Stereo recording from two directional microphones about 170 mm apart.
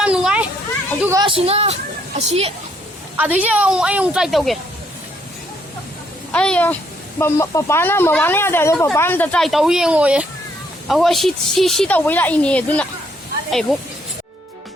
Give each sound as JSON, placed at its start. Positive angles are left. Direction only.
{"t": 0.0, "sound": "a sound", "side_deg": -5}
{"t": 1.2, "sound": "speech", "side_deg": -35}
{"t": 3.2, "sound": "a woman's voice", "side_deg": -10}
{"t": 6.3, "sound": "a woman's voice", "side_deg": 5}